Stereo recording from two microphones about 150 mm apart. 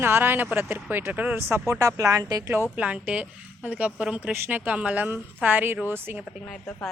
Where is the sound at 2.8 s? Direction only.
10° right (ahead or behind).